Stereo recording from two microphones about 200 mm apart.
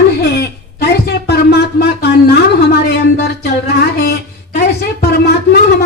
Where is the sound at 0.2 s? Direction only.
55° left (ahead or behind).